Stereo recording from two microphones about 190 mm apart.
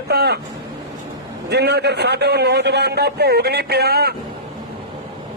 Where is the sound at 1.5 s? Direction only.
60° right (ahead or behind).